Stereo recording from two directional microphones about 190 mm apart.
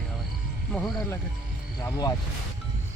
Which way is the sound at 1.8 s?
20° left (ahead or behind).